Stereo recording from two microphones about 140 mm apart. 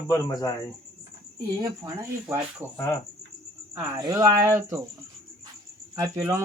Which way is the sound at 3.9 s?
25° right (ahead or behind).